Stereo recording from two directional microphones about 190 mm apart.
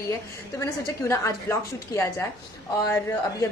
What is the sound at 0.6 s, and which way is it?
A woman's voice, 15° left (ahead or behind).